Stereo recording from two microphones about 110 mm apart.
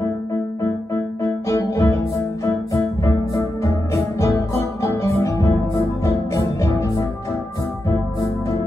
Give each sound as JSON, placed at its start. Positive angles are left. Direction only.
{"t": 1.2, "sound": "music", "side_deg": 25}